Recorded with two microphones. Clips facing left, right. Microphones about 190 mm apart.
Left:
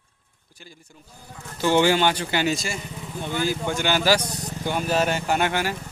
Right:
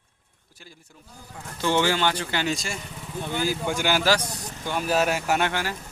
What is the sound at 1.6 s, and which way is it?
Speech, 15° left (ahead or behind).